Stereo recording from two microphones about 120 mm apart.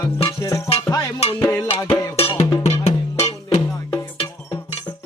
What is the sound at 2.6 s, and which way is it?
Music, 65° left (ahead or behind).